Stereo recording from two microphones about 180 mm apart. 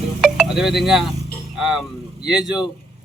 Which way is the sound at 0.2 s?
Centre (ahead or behind).